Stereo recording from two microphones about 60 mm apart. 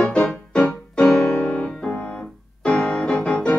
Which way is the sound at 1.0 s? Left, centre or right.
Centre.